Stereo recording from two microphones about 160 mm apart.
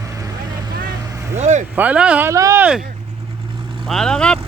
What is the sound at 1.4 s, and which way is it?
Vehicle, 45° right (ahead or behind).